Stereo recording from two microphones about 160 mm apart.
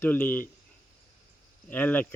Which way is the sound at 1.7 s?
10° left (ahead or behind).